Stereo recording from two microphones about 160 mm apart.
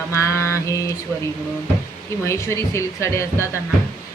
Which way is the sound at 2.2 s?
15° left (ahead or behind).